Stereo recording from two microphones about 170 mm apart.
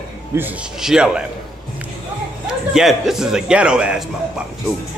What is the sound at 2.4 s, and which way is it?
A man's voice, centre (ahead or behind).